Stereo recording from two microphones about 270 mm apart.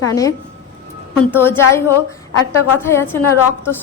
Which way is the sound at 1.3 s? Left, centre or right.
Centre.